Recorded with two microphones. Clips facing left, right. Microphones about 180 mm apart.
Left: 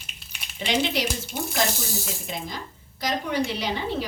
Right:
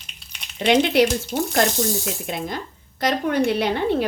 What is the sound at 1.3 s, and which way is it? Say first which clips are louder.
Speech: right 7 dB; 75° right (ahead or behind).